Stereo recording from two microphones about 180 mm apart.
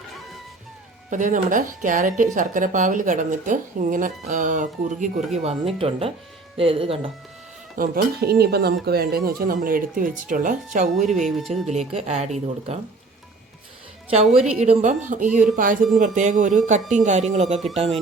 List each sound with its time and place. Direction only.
1.1 s a woman's voice: 45° right (ahead or behind); by 7.1 s 30° right (ahead or behind)
7.8 s speech: 60° right (ahead or behind); by 10.8 s 45° right (ahead or behind)
10.9 s speech: centre (ahead or behind)
11.7 s speech: 35° right (ahead or behind)
14.6 s a woman's voice: 40° right (ahead or behind)